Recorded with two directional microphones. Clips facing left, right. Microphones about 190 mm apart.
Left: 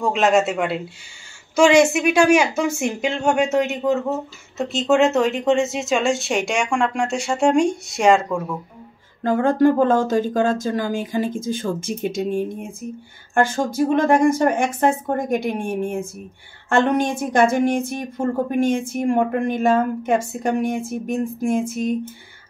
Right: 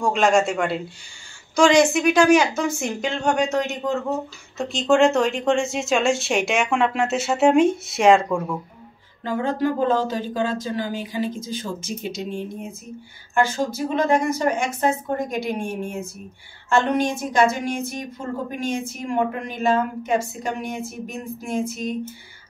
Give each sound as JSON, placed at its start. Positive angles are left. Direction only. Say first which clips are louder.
{"t": 0.0, "sound": "speech", "louder": "left 1 dB", "side_deg": 5}
{"t": 9.2, "sound": "a woman's voice", "louder": "left 7 dB", "side_deg": 50}